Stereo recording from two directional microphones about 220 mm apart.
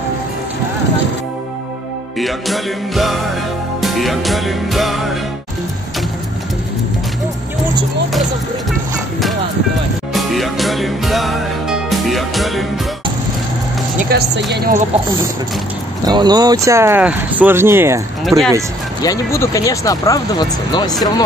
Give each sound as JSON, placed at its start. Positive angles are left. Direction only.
{"t": 2.1, "sound": "music", "side_deg": 0}
{"t": 10.1, "sound": "music", "side_deg": 0}
{"t": 13.9, "sound": "speech", "side_deg": -45}
{"t": 16.1, "sound": "speech", "side_deg": -20}
{"t": 19.0, "sound": "speech", "side_deg": 15}